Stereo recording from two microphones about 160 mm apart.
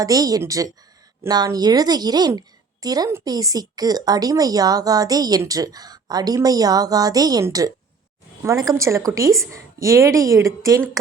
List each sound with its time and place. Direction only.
0.0 s speech: 25° right (ahead or behind)